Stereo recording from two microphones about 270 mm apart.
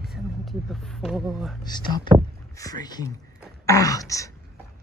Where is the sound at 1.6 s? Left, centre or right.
Centre.